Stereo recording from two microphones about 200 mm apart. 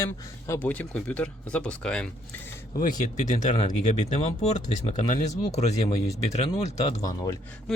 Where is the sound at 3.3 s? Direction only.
35° left (ahead or behind).